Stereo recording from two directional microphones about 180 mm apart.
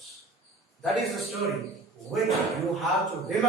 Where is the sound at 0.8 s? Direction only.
Centre (ahead or behind).